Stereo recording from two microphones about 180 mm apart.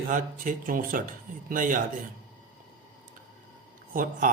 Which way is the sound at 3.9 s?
50° right (ahead or behind).